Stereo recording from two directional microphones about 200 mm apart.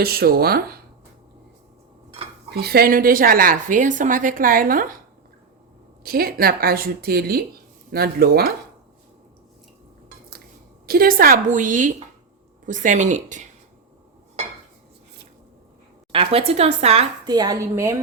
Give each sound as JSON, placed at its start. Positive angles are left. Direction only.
{"t": 0.0, "sound": "a woman's voice", "side_deg": -50}
{"t": 2.5, "sound": "a woman's voice", "side_deg": -50}
{"t": 6.0, "sound": "a woman's voice", "side_deg": -50}
{"t": 10.8, "sound": "a woman's voice", "side_deg": -50}
{"t": 16.1, "sound": "speech", "side_deg": -30}